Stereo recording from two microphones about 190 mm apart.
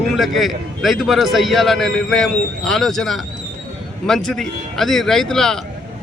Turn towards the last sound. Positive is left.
turn(degrees=0)  # may be behind; listen again after turning